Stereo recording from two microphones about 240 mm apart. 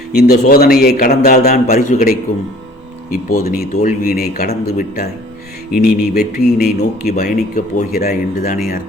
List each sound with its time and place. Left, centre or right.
0.2 s a man's voice: left
3.2 s a man's voice: left